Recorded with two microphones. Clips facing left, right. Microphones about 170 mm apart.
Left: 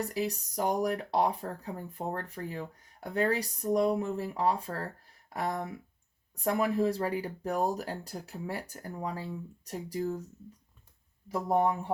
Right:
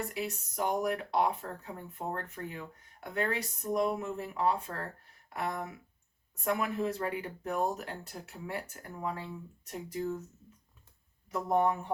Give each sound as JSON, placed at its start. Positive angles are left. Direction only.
{"t": 0.0, "sound": "speech", "side_deg": 35}
{"t": 11.3, "sound": "speech", "side_deg": 35}